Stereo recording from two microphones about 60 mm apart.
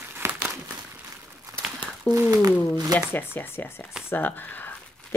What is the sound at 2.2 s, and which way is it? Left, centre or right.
Speech, right.